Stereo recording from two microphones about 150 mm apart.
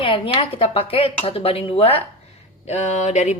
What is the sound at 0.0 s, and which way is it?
A woman's voice, 35° left (ahead or behind).